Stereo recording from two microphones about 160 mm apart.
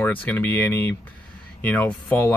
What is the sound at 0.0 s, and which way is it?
Speech, 10° left (ahead or behind).